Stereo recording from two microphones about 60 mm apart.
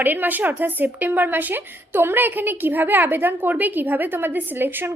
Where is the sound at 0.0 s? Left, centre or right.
Right.